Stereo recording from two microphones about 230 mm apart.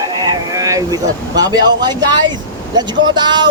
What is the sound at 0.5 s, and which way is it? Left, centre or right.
Speech, centre.